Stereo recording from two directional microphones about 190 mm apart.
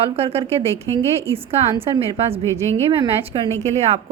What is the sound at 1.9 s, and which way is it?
A woman's voice, 20° right (ahead or behind).